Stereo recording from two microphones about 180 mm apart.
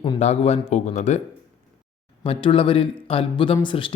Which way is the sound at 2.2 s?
30° left (ahead or behind).